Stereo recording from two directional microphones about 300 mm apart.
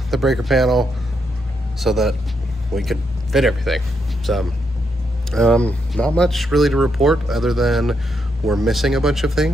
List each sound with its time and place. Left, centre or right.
0.1 s speech: centre